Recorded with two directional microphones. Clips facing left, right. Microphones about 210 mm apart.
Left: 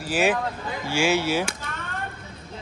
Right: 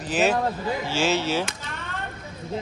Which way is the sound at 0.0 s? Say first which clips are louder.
Right 1 dB; 10° left (ahead or behind).